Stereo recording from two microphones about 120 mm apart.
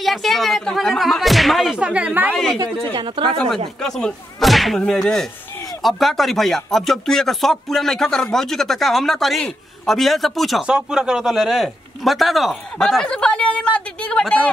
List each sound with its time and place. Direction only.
0.0 s speech: centre (ahead or behind)
2.6 s speech: 40° right (ahead or behind)
3.3 s speech: 5° left (ahead or behind)